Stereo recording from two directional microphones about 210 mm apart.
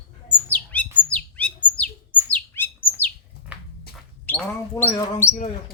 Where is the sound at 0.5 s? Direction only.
5° left (ahead or behind).